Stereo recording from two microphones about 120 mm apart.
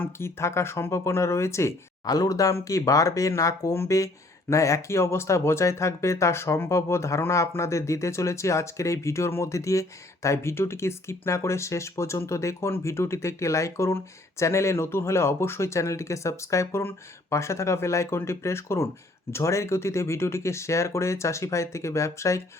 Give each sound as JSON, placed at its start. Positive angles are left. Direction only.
{"t": 0.0, "sound": "speech", "side_deg": 20}